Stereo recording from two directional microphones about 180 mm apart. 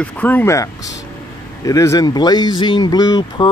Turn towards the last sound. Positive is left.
turn(degrees=25)  # may be behind; listen again after turning